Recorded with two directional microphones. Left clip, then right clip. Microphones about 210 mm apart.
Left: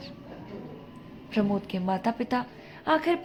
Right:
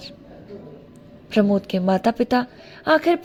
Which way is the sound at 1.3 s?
35° right (ahead or behind).